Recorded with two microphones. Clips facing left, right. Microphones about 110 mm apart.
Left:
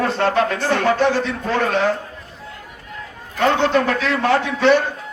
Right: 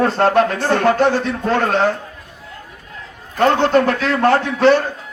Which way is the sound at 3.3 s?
45° right (ahead or behind).